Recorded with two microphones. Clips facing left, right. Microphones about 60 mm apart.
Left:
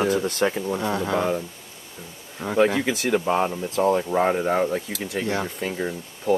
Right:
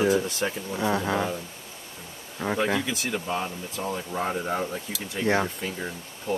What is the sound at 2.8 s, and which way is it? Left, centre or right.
Speech, left.